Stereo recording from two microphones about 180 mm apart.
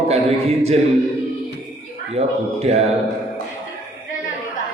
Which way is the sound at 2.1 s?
35° right (ahead or behind).